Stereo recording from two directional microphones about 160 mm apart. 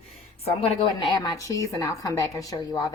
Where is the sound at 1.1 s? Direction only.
25° left (ahead or behind).